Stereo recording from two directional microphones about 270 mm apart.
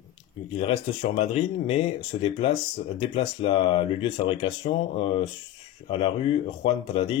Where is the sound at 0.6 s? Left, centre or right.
Left.